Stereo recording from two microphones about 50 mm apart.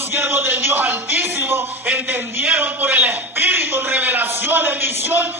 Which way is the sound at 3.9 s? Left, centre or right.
Right.